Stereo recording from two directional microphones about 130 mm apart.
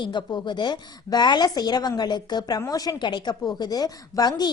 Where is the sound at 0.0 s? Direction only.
35° left (ahead or behind).